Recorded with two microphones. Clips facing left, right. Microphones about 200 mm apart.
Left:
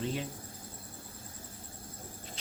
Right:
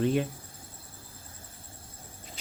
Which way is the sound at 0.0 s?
55° right (ahead or behind).